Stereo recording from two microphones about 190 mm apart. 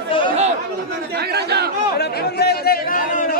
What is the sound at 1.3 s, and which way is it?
Chatter, 60° right (ahead or behind).